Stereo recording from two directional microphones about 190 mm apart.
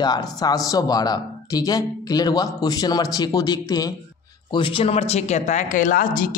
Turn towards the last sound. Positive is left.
turn(degrees=45)  # may be behind; listen again after turning